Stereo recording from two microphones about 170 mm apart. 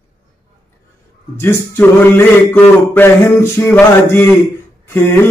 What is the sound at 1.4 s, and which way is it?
Male singing, 15° left (ahead or behind).